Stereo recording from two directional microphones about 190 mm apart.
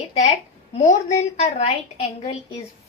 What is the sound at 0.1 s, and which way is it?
A woman's voice, 35° left (ahead or behind).